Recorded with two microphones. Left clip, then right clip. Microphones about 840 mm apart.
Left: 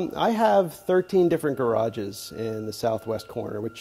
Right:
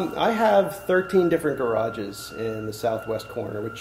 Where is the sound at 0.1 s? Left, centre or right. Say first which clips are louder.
Right 1 dB; left.